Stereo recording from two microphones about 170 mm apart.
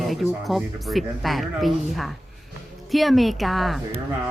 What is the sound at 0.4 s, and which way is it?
Speech, centre (ahead or behind).